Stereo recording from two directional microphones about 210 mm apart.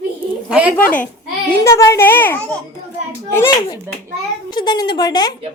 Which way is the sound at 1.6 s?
15° left (ahead or behind).